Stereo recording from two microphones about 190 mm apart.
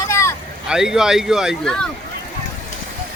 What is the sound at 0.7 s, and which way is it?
Speech, 5° right (ahead or behind).